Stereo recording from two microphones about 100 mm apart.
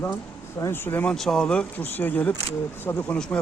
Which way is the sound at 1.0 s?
5° left (ahead or behind).